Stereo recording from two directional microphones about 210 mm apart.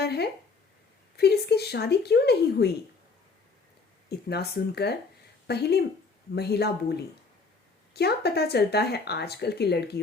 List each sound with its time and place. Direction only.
0.0 s speech: 50° left (ahead or behind)
4.1 s speech: 50° left (ahead or behind)